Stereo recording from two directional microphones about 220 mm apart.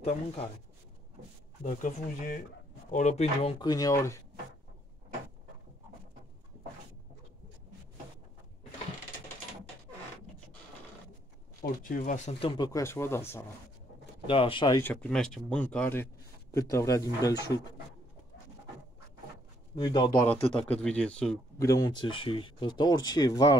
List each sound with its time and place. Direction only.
1.6 s speech: 35° left (ahead or behind); by 4.2 s 10° left (ahead or behind)
11.6 s speech: 35° left (ahead or behind)
12.4 s speech: 20° left (ahead or behind)
14.2 s speech: 25° left (ahead or behind)
14.8 s speech: 5° left (ahead or behind)
19.7 s speech: 20° left (ahead or behind)
20.5 s speech: 5° left (ahead or behind)
21.6 s speech: 15° left (ahead or behind)